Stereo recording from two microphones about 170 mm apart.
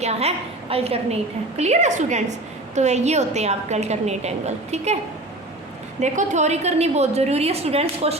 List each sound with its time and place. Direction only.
0.0 s a woman's voice: 40° right (ahead or behind)
6.0 s a woman's voice: 45° right (ahead or behind)